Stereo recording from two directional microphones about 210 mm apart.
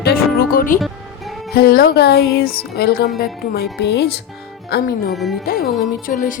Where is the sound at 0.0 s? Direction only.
45° left (ahead or behind).